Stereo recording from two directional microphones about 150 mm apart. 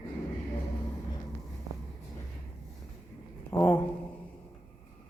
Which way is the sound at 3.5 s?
15° left (ahead or behind).